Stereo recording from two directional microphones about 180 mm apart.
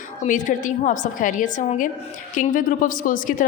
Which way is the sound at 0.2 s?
45° left (ahead or behind).